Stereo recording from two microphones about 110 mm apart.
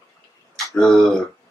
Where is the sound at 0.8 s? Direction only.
5° left (ahead or behind).